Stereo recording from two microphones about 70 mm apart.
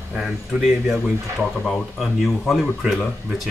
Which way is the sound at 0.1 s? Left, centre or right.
Centre.